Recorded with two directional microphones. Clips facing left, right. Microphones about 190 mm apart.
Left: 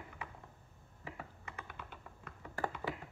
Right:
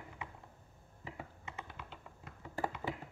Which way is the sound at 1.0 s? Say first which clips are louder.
Even; 20° right (ahead or behind).